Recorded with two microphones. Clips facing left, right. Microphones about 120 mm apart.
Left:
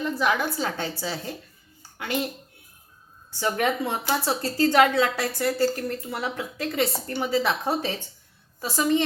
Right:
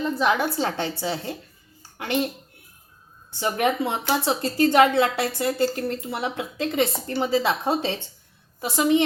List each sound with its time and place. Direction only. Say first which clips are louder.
0.0 s a woman's voice: right 2 dB; 25° right (ahead or behind)
3.3 s a woman's voice: right 2 dB; 20° right (ahead or behind)